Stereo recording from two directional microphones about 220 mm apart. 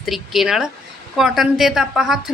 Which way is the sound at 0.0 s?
Centre (ahead or behind).